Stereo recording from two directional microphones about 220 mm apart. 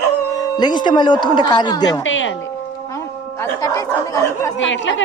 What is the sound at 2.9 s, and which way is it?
Speech, 15° left (ahead or behind).